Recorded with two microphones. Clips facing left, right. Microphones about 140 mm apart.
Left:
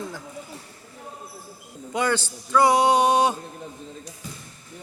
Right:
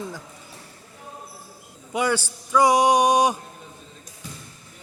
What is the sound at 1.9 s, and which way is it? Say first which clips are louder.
Speech: right 1 dB; 10° right (ahead or behind).